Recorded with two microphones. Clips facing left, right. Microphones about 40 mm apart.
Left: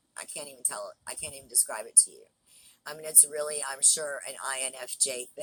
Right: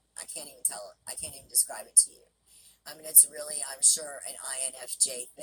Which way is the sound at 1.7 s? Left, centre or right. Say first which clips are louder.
Left 4 dB; left.